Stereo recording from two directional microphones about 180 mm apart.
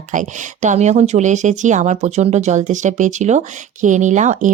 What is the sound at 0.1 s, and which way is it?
Speech, 45° right (ahead or behind).